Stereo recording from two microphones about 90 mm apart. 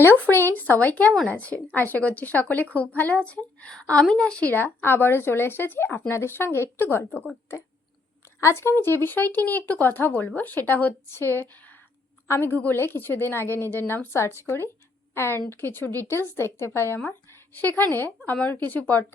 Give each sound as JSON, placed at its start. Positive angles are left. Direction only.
{"t": 0.0, "sound": "a woman's voice", "side_deg": 20}
{"t": 8.4, "sound": "a woman's voice", "side_deg": 30}
{"t": 12.3, "sound": "a woman's voice", "side_deg": 25}
{"t": 18.3, "sound": "a woman's voice", "side_deg": 15}